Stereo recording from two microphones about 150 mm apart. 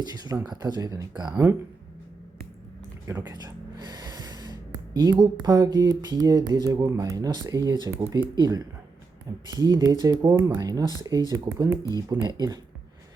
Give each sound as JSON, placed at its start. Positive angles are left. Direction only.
{"t": 0.0, "sound": "speech", "side_deg": -25}
{"t": 3.1, "sound": "gasp", "side_deg": -20}
{"t": 5.2, "sound": "speech", "side_deg": -25}